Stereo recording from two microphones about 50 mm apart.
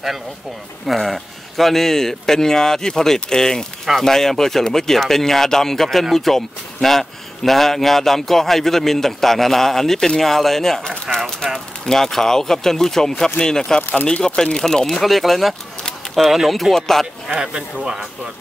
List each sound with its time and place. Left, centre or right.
0.8 s speech: centre
17.3 s speech: centre